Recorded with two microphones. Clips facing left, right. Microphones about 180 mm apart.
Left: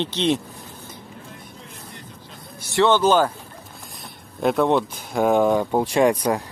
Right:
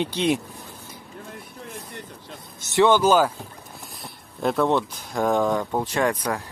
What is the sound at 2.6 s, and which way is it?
Speech, 20° right (ahead or behind).